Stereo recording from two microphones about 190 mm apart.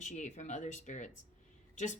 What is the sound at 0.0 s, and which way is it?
A woman's voice, 40° left (ahead or behind).